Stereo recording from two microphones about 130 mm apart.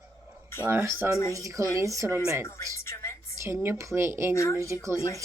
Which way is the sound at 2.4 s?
20° left (ahead or behind).